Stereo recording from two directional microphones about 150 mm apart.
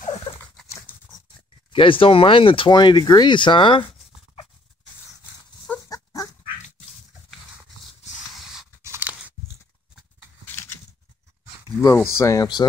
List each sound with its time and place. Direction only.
1.7 s speech: 35° left (ahead or behind)
5.9 s dog: 25° left (ahead or behind)
8.8 s biting: 15° right (ahead or behind)
10.4 s a sound: 15° left (ahead or behind)
11.9 s speech: 15° left (ahead or behind)